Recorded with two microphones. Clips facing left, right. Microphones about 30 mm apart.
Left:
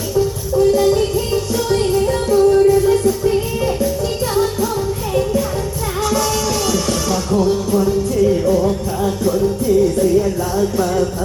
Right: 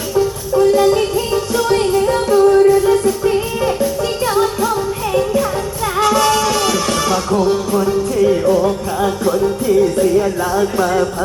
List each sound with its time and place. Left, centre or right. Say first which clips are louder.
0.6 s music: right 1 dB; centre
5.1 s music: right 2 dB; right